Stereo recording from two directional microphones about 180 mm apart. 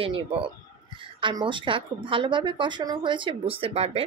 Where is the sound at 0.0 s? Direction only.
30° right (ahead or behind).